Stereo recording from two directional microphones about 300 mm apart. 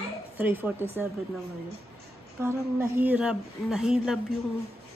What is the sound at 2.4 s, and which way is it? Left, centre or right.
Speech, centre.